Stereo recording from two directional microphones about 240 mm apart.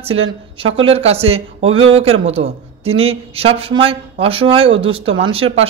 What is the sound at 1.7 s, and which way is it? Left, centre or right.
Speech, right.